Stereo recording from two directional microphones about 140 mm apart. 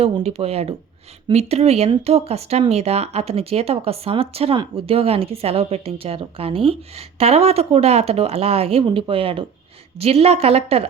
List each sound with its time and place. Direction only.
0.0 s speech: 45° right (ahead or behind)